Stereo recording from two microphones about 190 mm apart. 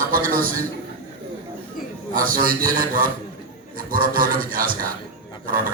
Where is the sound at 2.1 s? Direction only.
50° right (ahead or behind).